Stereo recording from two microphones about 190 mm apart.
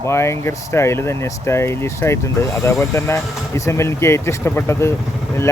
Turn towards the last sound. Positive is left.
turn(degrees=15)  # may be behind; listen again after turning